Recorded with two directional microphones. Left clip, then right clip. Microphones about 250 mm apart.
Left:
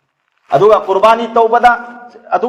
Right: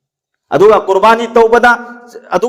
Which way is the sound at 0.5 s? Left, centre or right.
Right.